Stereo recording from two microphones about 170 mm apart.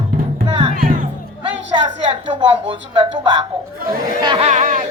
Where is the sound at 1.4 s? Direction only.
25° right (ahead or behind).